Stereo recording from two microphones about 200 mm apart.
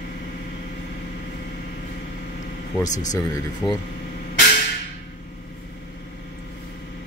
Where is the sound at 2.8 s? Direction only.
35° left (ahead or behind).